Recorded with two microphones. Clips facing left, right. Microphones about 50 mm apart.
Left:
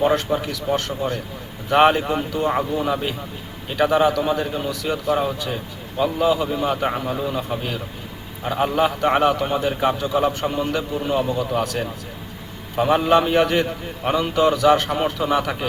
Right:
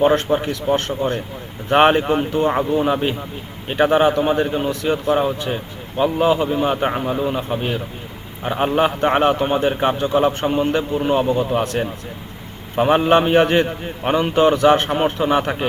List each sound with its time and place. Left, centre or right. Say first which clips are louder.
0.0 s a man's voice: right 3 dB; right